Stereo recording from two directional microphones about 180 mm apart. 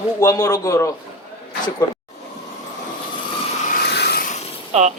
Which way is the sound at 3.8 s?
65° left (ahead or behind).